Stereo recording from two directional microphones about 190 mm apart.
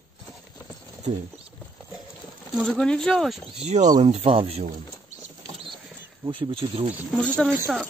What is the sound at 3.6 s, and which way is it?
Speech, 35° right (ahead or behind).